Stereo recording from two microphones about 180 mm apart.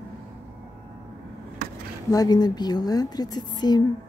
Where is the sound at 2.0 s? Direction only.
20° left (ahead or behind).